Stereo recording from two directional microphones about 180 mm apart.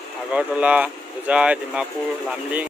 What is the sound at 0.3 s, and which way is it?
Speech, 5° right (ahead or behind).